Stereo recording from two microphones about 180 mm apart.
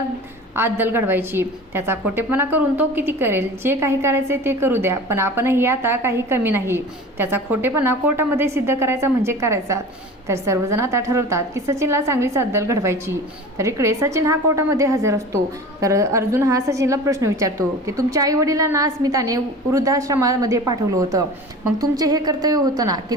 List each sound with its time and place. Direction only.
0.5 s a woman's voice: 10° right (ahead or behind)